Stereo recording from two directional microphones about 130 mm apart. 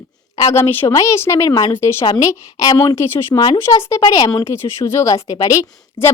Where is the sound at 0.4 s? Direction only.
20° left (ahead or behind).